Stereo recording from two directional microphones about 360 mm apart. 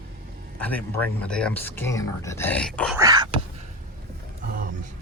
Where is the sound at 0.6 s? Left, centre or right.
Centre.